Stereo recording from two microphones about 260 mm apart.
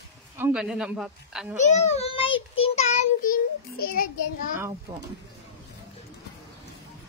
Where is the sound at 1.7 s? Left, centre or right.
Left.